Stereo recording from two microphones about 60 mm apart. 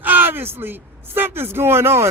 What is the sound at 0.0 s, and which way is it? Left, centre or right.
Speech, right.